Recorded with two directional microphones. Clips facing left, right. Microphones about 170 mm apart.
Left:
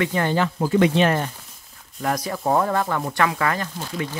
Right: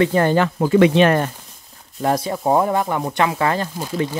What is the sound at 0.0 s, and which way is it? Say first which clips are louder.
Speech: right 6 dB; 40° right (ahead or behind).